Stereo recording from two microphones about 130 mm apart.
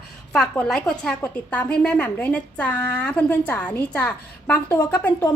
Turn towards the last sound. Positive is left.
turn(degrees=15)  # may be behind; listen again after turning